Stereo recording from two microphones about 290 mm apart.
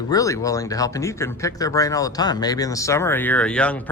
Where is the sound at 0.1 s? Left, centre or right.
Centre.